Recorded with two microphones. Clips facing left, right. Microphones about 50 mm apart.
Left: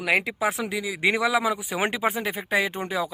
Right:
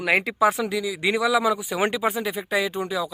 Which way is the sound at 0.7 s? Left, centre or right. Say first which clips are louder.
Right 3 dB; left.